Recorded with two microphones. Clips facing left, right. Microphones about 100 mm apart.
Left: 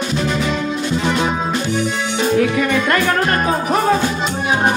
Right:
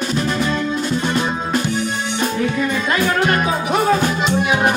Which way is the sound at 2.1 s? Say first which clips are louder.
Left 5 dB; 75° left (ahead or behind).